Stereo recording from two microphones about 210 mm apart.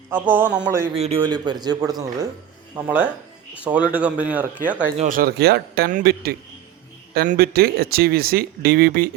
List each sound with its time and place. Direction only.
0.1 s a man's voice: 10° right (ahead or behind)
0.9 s a man's voice: 30° right (ahead or behind)
2.7 s a man's voice: 5° right (ahead or behind)
4.9 s speech: 40° right (ahead or behind)